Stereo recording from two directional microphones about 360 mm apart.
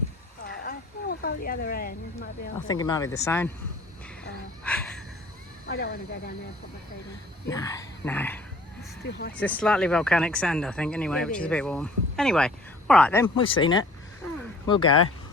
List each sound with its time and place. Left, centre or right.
0.4 s a sound: left
2.6 s speech: centre
4.6 s a sound: centre
5.6 s speech: left
7.5 s speech: centre
9.0 s speech: left
9.3 s speech: centre